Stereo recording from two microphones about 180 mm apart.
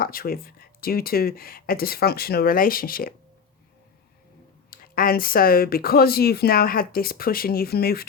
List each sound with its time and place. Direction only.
0.0 s speech: 55° left (ahead or behind)
4.7 s speech: 55° left (ahead or behind)